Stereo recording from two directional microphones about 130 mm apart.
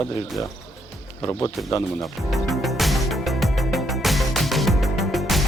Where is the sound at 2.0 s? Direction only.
Centre (ahead or behind).